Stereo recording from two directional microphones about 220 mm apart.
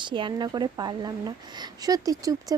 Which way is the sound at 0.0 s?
20° right (ahead or behind).